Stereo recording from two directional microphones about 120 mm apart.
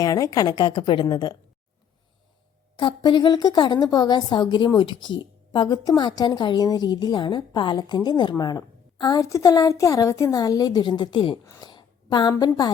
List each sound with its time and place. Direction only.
0.0 s a woman's voice: 30° left (ahead or behind)
2.7 s a woman's voice: 40° left (ahead or behind)
11.6 s a sound: 35° left (ahead or behind)
12.4 s a woman's voice: 35° left (ahead or behind)